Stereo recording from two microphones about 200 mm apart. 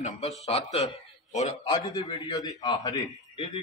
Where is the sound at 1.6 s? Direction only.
25° left (ahead or behind).